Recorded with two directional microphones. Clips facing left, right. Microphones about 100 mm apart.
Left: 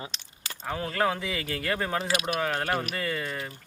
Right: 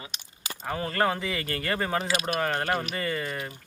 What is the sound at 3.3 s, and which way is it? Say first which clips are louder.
Speech: right 1 dB; 15° right (ahead or behind).